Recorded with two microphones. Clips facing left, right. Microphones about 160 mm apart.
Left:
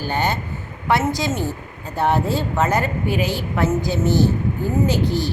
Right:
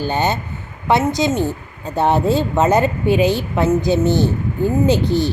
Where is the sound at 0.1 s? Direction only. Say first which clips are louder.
Right 3 dB; 20° right (ahead or behind).